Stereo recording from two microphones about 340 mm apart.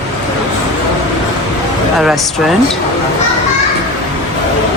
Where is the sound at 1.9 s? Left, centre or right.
Centre.